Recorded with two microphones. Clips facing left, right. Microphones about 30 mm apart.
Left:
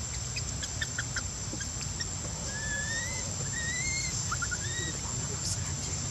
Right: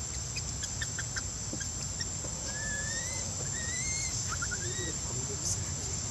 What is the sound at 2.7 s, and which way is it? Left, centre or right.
Vehicle, left.